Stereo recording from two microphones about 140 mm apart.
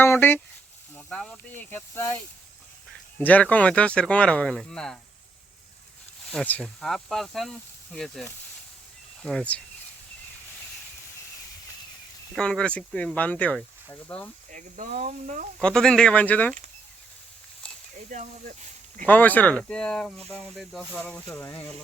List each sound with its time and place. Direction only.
0.0 s speech: 15° left (ahead or behind)
3.2 s speech: 10° left (ahead or behind)
6.3 s speech: 5° left (ahead or behind)
12.3 s speech: 5° left (ahead or behind)
14.5 s speech: 70° right (ahead or behind)
15.6 s speech: 5° left (ahead or behind)
18.1 s speech: 65° right (ahead or behind)
19.0 s speech: 10° left (ahead or behind)